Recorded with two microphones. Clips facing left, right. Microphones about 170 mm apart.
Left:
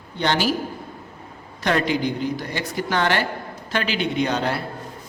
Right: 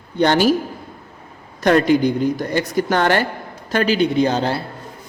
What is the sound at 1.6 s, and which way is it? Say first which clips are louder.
A man's voice: right 7 dB; 45° right (ahead or behind).